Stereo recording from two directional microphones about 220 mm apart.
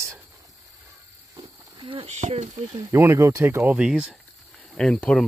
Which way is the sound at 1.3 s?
20° right (ahead or behind).